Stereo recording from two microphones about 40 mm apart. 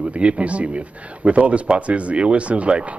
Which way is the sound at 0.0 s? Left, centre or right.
Right.